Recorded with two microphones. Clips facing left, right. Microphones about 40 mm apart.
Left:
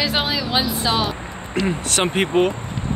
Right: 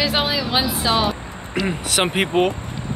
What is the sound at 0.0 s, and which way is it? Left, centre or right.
Speech, centre.